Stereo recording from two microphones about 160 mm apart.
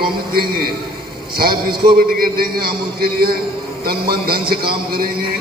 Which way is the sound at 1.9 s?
65° right (ahead or behind).